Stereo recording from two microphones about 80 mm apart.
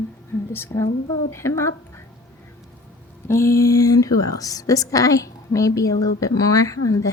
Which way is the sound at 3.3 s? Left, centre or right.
Left.